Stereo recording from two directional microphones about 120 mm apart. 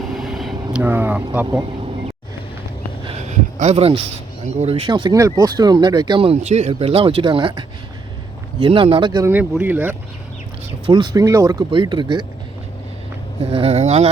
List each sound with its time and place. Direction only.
0.1 s air conditioning: centre (ahead or behind)
0.8 s speech: 15° right (ahead or behind)
3.2 s a sound: 80° right; by 4.0 s 55° right (ahead or behind)
4.9 s speech: 35° right (ahead or behind)
6.4 s speech: 70° right (ahead or behind); by 9.2 s 40° right (ahead or behind)
9.2 s speech: 15° right (ahead or behind)
10.8 s speech: 40° right (ahead or behind)
11.1 s speech: 25° right (ahead or behind)
11.7 s speech: 40° right (ahead or behind)
13.4 s speech: 55° right (ahead or behind)